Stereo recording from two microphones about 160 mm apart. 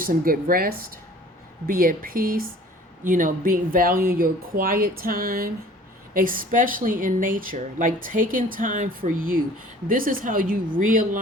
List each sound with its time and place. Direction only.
0.0 s speech: 60° right (ahead or behind)